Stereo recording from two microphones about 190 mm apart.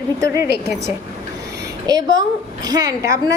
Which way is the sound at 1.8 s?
20° right (ahead or behind).